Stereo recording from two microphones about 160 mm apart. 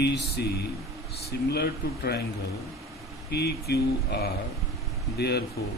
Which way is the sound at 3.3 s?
90° left.